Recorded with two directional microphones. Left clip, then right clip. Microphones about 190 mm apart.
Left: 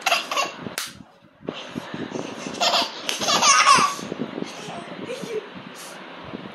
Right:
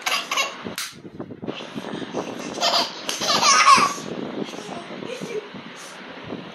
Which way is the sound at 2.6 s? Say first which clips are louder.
Even; 20° left (ahead or behind).